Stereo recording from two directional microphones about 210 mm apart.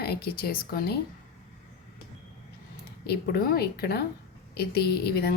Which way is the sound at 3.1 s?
45° left (ahead or behind).